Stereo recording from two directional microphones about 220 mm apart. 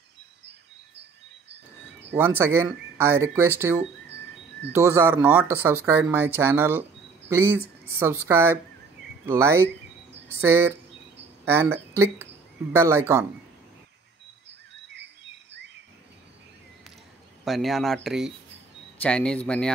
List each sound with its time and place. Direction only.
1.5 s bird: 50° right (ahead or behind)
2.1 s speech: 10° right (ahead or behind)
4.1 s a sound: 50° right (ahead or behind)
4.7 s speech: 10° right (ahead or behind)
17.5 s speech: centre (ahead or behind)